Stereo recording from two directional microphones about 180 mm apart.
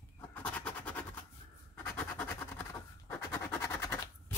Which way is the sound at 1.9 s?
10° left (ahead or behind).